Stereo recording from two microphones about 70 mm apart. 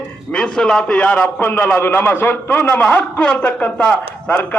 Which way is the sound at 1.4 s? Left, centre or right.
Left.